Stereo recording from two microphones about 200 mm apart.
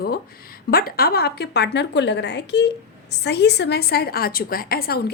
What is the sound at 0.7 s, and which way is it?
A woman's voice, 50° left (ahead or behind).